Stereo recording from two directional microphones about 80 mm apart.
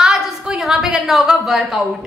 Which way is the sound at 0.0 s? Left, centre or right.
Centre.